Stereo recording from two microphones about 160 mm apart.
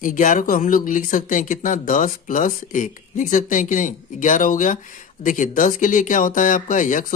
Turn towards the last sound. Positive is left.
turn(degrees=55)  # may be behind; listen again after turning